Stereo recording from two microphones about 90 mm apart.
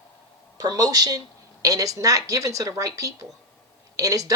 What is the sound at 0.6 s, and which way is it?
Speech, 45° right (ahead or behind).